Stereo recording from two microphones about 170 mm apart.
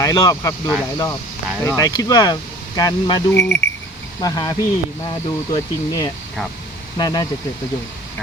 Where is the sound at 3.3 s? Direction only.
10° left (ahead or behind).